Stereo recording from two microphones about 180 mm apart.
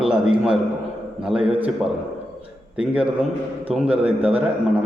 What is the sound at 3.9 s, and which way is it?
Speech, 35° right (ahead or behind).